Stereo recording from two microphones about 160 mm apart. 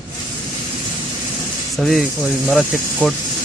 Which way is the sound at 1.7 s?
Centre (ahead or behind).